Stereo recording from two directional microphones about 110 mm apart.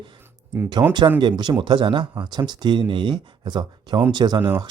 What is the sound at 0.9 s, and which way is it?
Speech, 45° right (ahead or behind).